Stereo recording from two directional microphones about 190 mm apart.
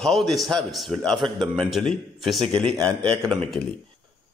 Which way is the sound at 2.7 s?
20° right (ahead or behind).